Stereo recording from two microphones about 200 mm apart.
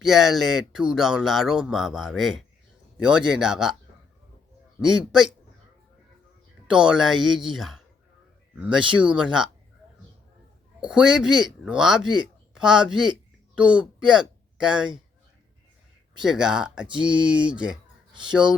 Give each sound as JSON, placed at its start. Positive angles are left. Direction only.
{"t": 0.0, "sound": "speech", "side_deg": 0}
{"t": 6.7, "sound": "speech", "side_deg": -5}
{"t": 10.8, "sound": "speech", "side_deg": -5}
{"t": 16.2, "sound": "speech", "side_deg": -5}